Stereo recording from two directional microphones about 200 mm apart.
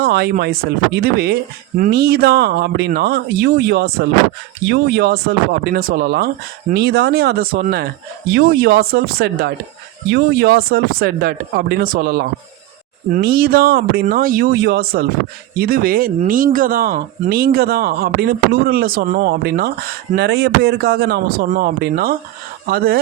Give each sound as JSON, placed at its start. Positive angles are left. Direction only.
{"t": 0.0, "sound": "speech", "side_deg": -55}